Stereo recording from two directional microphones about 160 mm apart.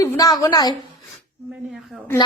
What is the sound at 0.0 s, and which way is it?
Speech, 20° left (ahead or behind).